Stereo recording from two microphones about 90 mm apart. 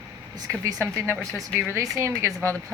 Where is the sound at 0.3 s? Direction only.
45° right (ahead or behind).